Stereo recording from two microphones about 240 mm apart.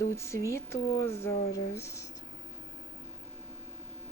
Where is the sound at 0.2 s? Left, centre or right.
Centre.